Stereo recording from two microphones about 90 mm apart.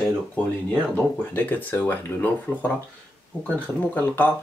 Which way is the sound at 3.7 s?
25° left (ahead or behind).